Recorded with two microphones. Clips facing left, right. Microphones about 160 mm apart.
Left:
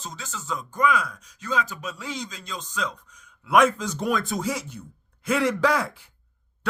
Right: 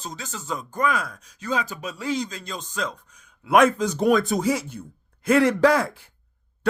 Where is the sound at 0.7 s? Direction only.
45° right (ahead or behind).